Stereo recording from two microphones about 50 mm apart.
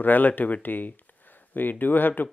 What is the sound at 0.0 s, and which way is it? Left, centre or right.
Speech, left.